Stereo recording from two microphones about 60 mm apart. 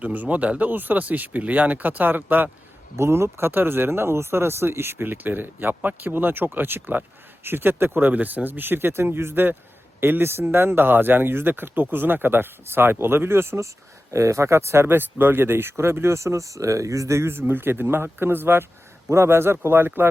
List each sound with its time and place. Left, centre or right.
0.0 s speech: right
2.9 s speech: right
14.1 s speech: right
19.0 s speech: right